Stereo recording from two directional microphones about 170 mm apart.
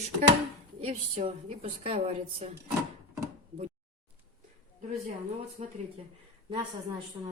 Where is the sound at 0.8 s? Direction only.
35° right (ahead or behind).